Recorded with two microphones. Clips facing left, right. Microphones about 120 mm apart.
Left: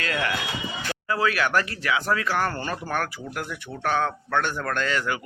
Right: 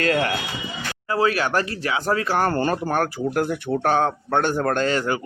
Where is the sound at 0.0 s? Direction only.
40° right (ahead or behind).